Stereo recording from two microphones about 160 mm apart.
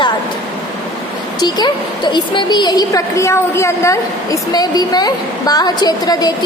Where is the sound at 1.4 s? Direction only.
25° left (ahead or behind).